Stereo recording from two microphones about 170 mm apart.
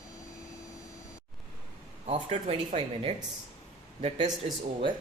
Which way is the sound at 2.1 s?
40° right (ahead or behind).